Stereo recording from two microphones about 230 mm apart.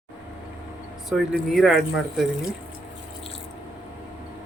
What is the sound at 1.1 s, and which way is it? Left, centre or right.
Speech, centre.